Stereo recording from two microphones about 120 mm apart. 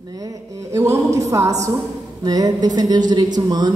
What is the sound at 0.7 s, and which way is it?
A woman's voice, 25° right (ahead or behind).